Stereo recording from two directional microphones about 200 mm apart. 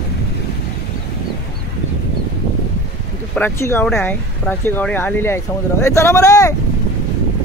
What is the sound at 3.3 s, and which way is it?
Speech, 10° left (ahead or behind).